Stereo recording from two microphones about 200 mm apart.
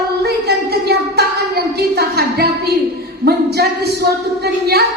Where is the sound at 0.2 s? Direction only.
55° right (ahead or behind).